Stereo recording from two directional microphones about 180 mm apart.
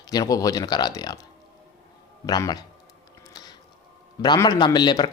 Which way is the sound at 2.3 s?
20° left (ahead or behind).